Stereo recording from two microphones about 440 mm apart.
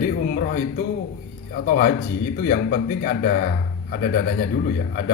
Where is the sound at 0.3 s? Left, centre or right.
Centre.